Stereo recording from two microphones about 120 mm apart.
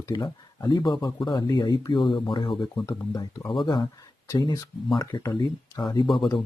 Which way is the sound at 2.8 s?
30° left (ahead or behind).